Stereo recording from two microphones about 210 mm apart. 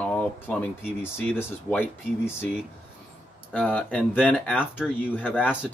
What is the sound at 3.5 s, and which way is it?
Speech, 5° left (ahead or behind).